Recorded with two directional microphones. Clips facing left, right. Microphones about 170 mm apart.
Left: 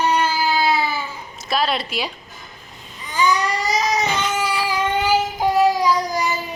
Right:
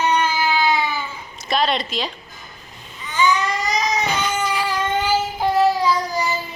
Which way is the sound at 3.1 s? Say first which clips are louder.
Even; 35° left (ahead or behind).